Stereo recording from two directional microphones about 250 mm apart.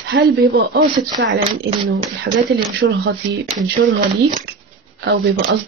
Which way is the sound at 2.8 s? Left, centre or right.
Right.